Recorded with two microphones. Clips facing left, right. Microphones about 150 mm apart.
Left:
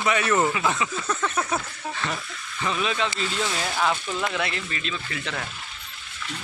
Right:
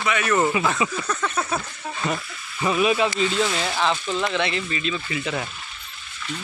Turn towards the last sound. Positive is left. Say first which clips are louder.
# right 5 dB
turn(degrees=-10)  # may be behind; listen again after turning